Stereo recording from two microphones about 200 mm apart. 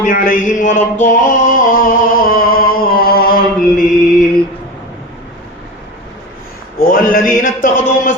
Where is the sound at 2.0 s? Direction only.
45° left (ahead or behind).